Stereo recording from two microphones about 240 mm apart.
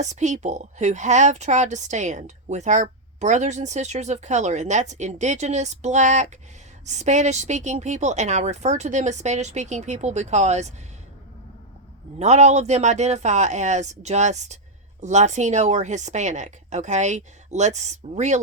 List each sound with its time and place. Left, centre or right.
0.0 s speech: right
12.2 s speech: right